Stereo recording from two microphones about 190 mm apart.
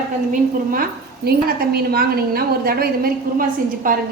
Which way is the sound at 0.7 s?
50° right (ahead or behind).